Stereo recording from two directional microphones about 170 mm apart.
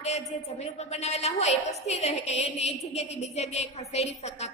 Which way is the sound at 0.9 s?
40° left (ahead or behind).